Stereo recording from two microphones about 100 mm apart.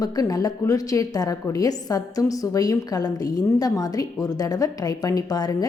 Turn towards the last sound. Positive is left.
turn(degrees=40)  # may be behind; listen again after turning